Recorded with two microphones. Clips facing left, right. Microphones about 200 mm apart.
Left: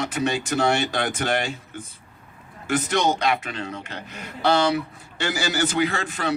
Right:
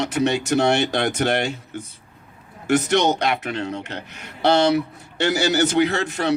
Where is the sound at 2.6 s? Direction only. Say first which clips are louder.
Right 4 dB; 70° right (ahead or behind).